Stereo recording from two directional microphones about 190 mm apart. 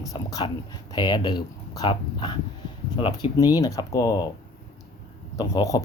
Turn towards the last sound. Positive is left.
turn(degrees=20)  # may be behind; listen again after turning